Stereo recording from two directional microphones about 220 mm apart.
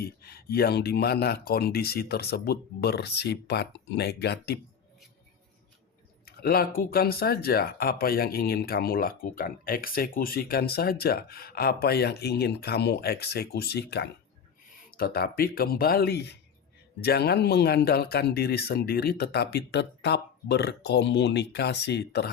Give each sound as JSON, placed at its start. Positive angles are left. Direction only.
{"t": 0.0, "sound": "speech", "side_deg": 45}
{"t": 6.2, "sound": "speech", "side_deg": 45}